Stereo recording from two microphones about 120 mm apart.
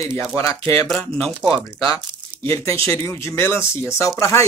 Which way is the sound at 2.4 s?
25° left (ahead or behind).